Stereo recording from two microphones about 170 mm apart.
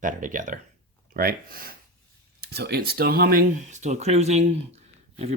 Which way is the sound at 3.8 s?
40° right (ahead or behind).